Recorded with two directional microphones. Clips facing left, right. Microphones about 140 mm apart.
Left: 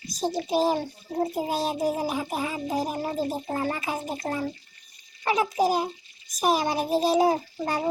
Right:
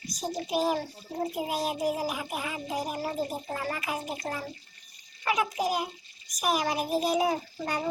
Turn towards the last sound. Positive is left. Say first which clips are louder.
# left 4 dB
turn(degrees=30)  # may be behind; listen again after turning